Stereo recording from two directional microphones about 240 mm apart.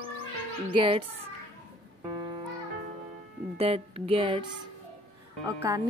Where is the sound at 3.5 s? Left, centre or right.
Right.